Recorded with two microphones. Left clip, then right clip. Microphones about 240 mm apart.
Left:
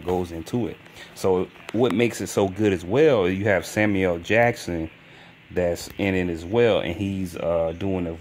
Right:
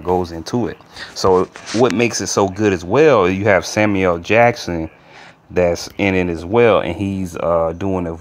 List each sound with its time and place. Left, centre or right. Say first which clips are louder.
0.0 s speech: right 8 dB; centre
0.5 s speech: right 7 dB; centre